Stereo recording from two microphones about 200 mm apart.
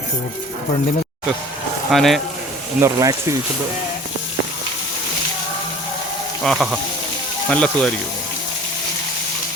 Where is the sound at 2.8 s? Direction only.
15° right (ahead or behind).